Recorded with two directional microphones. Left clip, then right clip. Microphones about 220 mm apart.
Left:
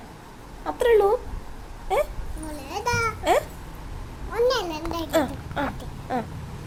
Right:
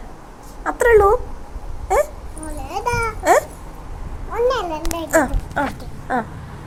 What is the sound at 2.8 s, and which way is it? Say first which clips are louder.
Babbling: right 3 dB; 5° left (ahead or behind).